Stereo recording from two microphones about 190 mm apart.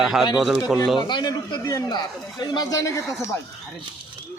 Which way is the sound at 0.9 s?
25° left (ahead or behind).